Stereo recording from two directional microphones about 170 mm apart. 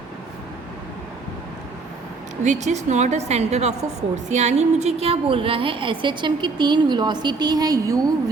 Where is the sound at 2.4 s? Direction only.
45° right (ahead or behind).